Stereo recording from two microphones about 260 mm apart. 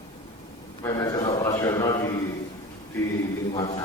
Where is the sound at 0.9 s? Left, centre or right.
Centre.